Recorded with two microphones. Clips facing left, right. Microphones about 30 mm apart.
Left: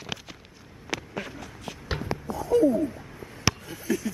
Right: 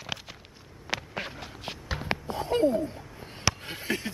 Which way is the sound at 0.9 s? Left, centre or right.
Right.